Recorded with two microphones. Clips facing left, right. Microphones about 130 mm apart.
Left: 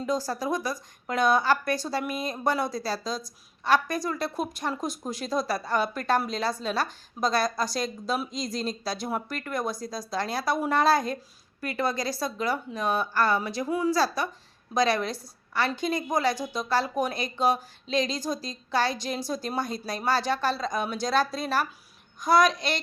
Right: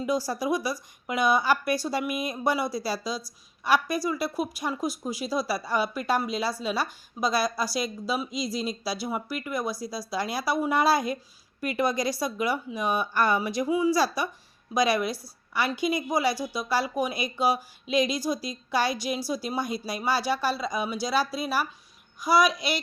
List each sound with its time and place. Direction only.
0.0 s a woman's voice: 10° right (ahead or behind)